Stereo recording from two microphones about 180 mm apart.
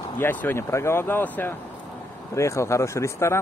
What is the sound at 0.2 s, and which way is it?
Speech, 10° left (ahead or behind).